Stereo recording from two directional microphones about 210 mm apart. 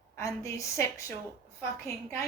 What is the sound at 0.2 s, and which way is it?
A woman's voice, 15° left (ahead or behind).